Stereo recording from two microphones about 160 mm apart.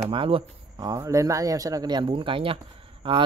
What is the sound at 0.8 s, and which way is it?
Speech, 20° right (ahead or behind).